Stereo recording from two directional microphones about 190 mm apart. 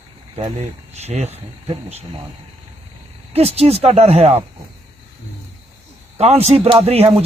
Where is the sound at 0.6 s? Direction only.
35° right (ahead or behind).